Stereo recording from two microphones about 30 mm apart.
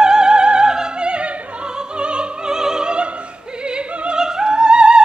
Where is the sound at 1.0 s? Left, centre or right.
Right.